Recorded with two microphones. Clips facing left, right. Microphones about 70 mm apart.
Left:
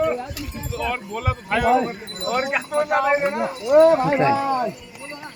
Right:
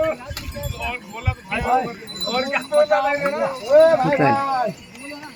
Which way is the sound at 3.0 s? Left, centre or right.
Centre.